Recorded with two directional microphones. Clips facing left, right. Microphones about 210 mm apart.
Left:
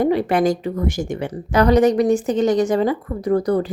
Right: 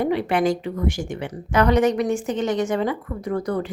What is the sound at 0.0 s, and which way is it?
A woman's voice, 40° left (ahead or behind).